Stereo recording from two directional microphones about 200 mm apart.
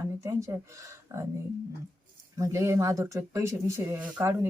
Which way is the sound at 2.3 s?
15° right (ahead or behind).